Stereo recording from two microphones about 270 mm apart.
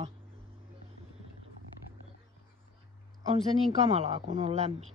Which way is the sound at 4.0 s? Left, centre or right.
Right.